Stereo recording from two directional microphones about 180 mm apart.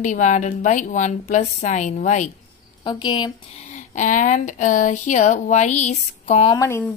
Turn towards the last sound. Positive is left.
turn(degrees=15)  # may be behind; listen again after turning